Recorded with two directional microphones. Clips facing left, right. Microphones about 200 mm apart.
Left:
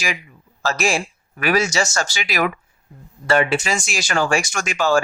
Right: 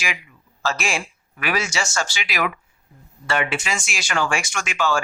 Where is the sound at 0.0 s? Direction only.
40° left (ahead or behind).